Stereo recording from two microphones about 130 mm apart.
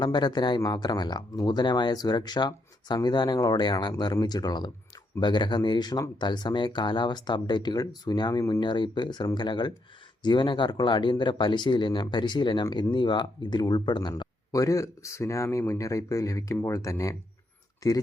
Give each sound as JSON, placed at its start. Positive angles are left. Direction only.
{"t": 0.0, "sound": "speech", "side_deg": 35}